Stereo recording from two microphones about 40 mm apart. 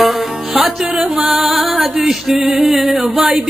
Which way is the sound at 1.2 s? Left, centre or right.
Centre.